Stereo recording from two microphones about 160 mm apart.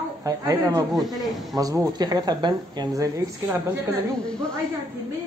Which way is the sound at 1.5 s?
20° right (ahead or behind).